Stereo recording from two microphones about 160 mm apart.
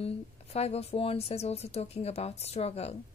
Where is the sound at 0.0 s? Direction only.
40° left (ahead or behind).